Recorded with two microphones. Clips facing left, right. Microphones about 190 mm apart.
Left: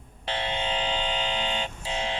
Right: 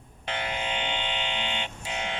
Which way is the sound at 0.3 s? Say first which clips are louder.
Left 2 dB; 30° left (ahead or behind).